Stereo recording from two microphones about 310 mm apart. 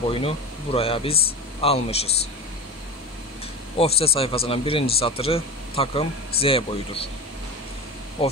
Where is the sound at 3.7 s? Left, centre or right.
Centre.